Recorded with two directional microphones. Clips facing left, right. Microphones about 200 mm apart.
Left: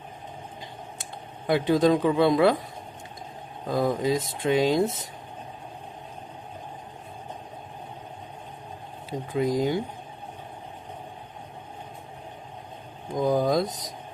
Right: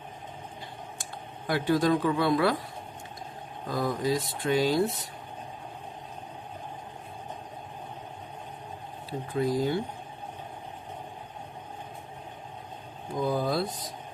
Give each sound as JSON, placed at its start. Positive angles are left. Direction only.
{"t": 1.5, "sound": "speech", "side_deg": 20}
{"t": 3.7, "sound": "speech", "side_deg": 25}
{"t": 9.0, "sound": "speech", "side_deg": 20}
{"t": 13.2, "sound": "speech", "side_deg": 45}